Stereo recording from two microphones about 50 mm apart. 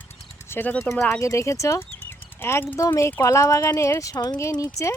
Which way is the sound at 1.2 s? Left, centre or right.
Left.